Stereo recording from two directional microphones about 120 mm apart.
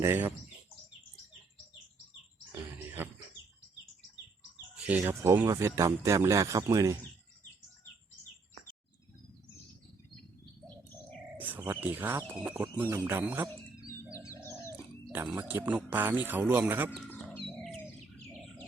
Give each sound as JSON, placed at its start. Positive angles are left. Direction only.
{"t": 0.0, "sound": "speech", "side_deg": -20}
{"t": 2.8, "sound": "a sound", "side_deg": -15}
{"t": 4.7, "sound": "bird", "side_deg": -10}
{"t": 5.2, "sound": "speech", "side_deg": -20}
{"t": 11.3, "sound": "speech", "side_deg": -15}
{"t": 13.9, "sound": "bird", "side_deg": 25}
{"t": 15.1, "sound": "speech", "side_deg": -15}